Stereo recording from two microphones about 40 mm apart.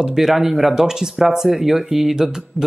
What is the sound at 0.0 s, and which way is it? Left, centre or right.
Speech, centre.